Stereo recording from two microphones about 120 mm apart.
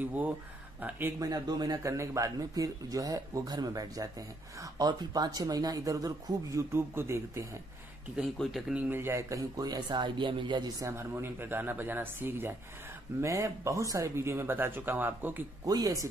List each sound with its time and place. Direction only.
0.7 s speech: 15° right (ahead or behind)
1.2 s speech: 30° right (ahead or behind)
8.2 s speech: centre (ahead or behind)
8.7 s speech: 15° right (ahead or behind); by 10.7 s 40° right (ahead or behind)
10.8 s speech: 20° right (ahead or behind)
15.6 s speech: 30° right (ahead or behind)